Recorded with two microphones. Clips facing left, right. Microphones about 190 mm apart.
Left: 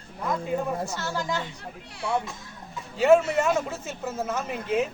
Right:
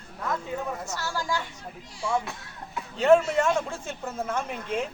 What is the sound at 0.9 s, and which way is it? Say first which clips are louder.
Speech: left 1 dB; 20° left (ahead or behind).